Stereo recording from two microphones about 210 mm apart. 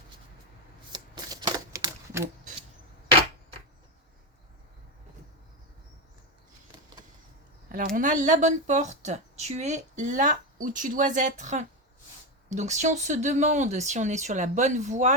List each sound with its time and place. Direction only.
0.9 s typewriter: 20° right (ahead or behind)
7.7 s speech: 40° right (ahead or behind)